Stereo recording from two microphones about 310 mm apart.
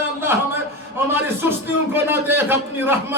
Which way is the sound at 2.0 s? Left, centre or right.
Centre.